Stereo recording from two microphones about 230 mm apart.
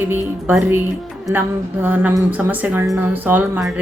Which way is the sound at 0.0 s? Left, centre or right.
Centre.